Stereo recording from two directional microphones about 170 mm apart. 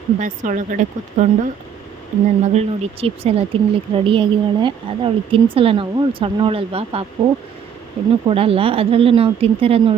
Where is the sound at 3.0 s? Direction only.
35° right (ahead or behind).